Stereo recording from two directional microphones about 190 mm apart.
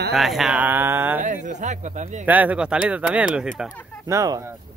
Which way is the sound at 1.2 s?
40° right (ahead or behind).